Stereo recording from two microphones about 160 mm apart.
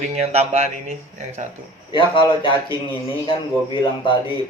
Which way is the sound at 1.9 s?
30° left (ahead or behind).